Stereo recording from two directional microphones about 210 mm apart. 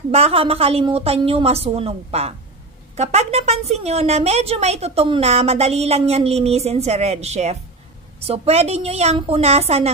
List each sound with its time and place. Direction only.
0.1 s a woman's voice: 30° right (ahead or behind)